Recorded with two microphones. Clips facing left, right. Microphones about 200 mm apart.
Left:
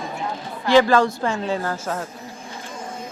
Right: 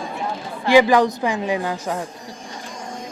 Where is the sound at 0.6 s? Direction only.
15° right (ahead or behind).